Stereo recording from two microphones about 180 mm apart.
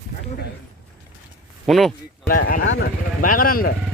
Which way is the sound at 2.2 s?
50° left (ahead or behind).